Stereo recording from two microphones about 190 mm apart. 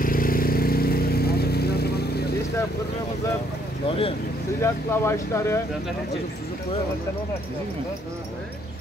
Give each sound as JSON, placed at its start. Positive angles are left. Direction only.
{"t": 0.0, "sound": "vehicle", "side_deg": 50}
{"t": 4.6, "sound": "speech", "side_deg": 15}